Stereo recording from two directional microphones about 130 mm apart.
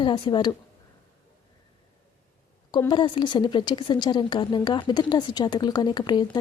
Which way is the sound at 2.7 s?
35° left (ahead or behind).